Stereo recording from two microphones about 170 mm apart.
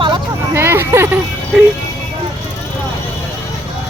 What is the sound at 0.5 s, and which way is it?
Speech, 15° right (ahead or behind).